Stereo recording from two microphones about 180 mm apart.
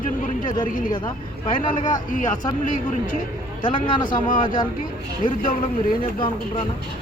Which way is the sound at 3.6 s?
25° left (ahead or behind).